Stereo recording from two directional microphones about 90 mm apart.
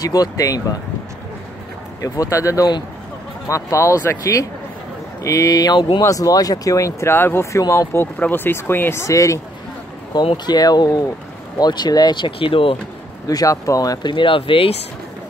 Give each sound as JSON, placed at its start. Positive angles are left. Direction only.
{"t": 0.0, "sound": "speech", "side_deg": 45}
{"t": 2.0, "sound": "speech", "side_deg": 40}
{"t": 10.3, "sound": "speech", "side_deg": 50}
{"t": 13.3, "sound": "speech", "side_deg": 40}
{"t": 14.0, "sound": "speech", "side_deg": 70}